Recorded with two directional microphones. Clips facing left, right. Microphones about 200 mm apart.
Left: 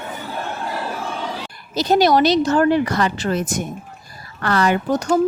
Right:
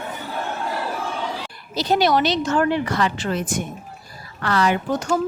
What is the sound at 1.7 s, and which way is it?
Speech, 45° left (ahead or behind).